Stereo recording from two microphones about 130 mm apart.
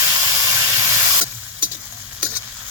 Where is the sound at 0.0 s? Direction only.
20° right (ahead or behind).